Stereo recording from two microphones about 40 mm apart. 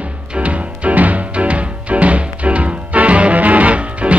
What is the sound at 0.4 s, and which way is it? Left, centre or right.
Music, right.